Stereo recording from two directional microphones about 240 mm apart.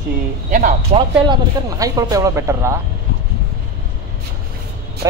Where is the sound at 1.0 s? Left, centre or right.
Centre.